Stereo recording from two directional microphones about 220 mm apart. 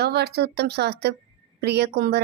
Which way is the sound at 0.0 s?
50° right (ahead or behind).